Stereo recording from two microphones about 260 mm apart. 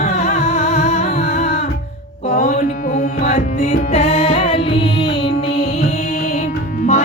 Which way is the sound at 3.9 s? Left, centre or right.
Left.